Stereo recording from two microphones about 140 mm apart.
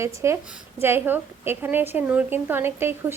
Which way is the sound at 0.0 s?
20° right (ahead or behind).